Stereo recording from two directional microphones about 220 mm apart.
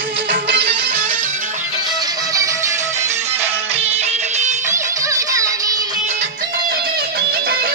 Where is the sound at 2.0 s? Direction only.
15° right (ahead or behind).